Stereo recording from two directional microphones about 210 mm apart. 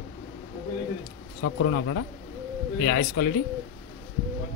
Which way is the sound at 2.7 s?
50° left (ahead or behind).